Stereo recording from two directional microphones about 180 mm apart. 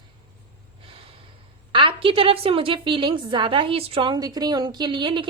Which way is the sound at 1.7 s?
30° right (ahead or behind).